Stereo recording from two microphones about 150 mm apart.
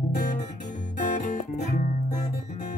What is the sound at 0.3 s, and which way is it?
Guitar, 55° left (ahead or behind).